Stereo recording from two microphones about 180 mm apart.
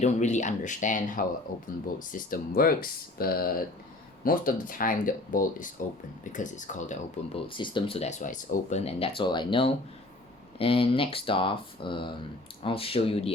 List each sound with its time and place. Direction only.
0.0 s speech: 40° left (ahead or behind)